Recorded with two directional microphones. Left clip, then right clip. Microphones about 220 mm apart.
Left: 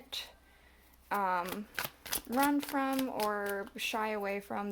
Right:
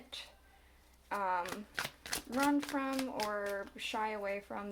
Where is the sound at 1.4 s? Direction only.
20° left (ahead or behind).